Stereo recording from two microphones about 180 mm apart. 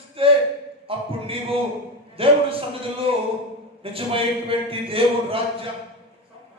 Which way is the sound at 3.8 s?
30° right (ahead or behind).